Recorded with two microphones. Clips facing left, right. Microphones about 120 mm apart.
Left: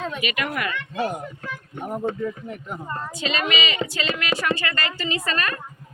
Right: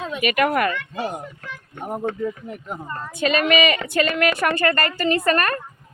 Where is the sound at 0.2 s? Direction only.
50° right (ahead or behind).